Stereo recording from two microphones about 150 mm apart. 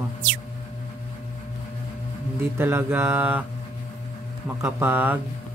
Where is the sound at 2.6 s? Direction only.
15° right (ahead or behind).